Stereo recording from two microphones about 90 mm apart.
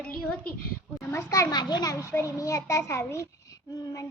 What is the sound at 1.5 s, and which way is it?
A child's voice, 50° left (ahead or behind).